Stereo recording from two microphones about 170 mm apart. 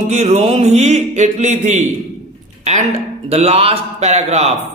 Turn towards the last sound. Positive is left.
turn(degrees=-40)  # may be behind; listen again after turning